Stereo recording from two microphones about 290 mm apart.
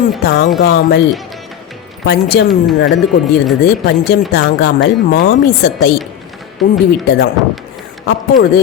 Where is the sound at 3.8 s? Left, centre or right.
Left.